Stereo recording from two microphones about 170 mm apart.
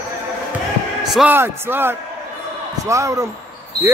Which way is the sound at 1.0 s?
Centre (ahead or behind).